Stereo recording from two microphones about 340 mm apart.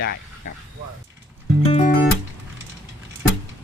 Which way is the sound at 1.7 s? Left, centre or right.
Left.